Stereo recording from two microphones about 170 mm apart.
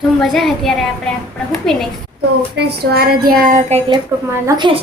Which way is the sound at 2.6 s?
75° right (ahead or behind).